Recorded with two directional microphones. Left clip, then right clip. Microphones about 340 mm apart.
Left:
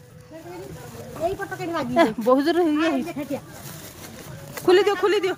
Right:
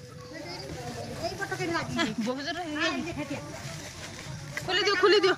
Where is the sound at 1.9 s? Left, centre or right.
Centre.